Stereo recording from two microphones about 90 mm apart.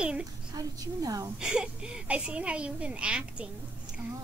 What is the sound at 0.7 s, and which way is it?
Speech, 40° right (ahead or behind).